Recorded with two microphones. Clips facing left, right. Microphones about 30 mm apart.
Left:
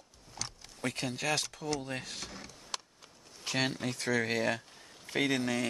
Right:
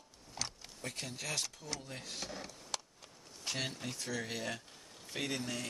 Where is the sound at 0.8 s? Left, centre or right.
Left.